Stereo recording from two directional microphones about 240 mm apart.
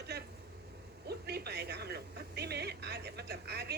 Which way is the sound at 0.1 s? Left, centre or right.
Right.